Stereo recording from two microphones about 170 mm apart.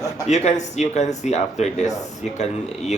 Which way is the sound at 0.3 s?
45° left (ahead or behind).